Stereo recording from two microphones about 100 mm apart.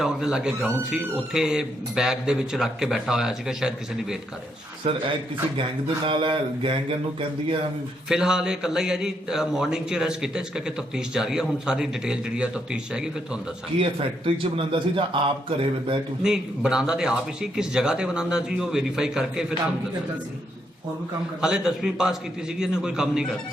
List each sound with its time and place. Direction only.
0.0 s a man's voice: 5° right (ahead or behind)
4.8 s a man's voice: 90° right
6.1 s a man's voice: 55° right (ahead or behind)
8.1 s a man's voice: 5° right (ahead or behind)
14.3 s a man's voice: 65° right (ahead or behind)
16.2 s speech: 5° right (ahead or behind)
21.4 s a man's voice: 5° right (ahead or behind)